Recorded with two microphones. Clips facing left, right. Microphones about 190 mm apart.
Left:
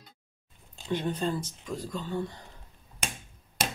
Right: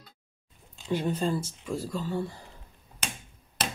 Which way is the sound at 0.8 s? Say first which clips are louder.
Right 2 dB; 5° right (ahead or behind).